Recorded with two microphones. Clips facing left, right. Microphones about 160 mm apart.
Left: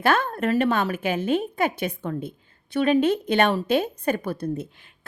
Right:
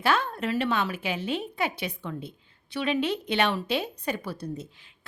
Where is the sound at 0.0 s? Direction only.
50° left (ahead or behind).